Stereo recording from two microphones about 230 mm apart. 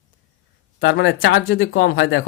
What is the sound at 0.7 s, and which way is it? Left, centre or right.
Speech, left.